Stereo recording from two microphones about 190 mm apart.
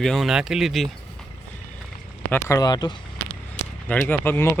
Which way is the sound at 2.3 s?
10° left (ahead or behind).